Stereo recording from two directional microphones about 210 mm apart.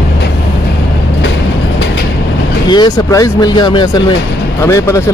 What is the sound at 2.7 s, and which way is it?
Speech, 20° left (ahead or behind).